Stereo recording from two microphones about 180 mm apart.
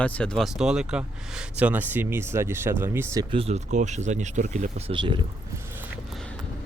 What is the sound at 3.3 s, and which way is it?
Speech, 35° right (ahead or behind).